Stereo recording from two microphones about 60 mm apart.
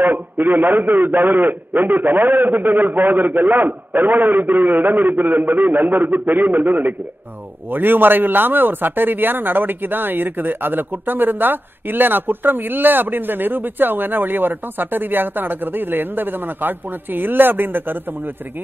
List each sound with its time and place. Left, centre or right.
0.0 s speech: right